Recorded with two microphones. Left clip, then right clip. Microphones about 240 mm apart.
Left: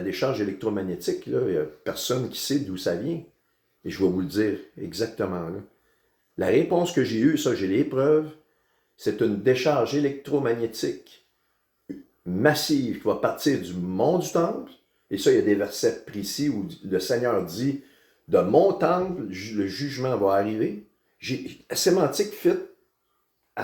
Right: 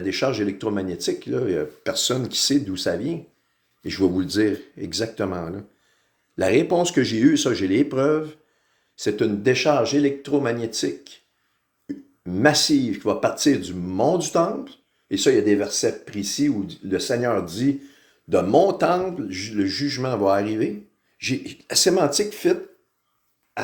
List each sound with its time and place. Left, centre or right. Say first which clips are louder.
0.0 s speech: right 3 dB; right
12.2 s speech: right 4 dB; right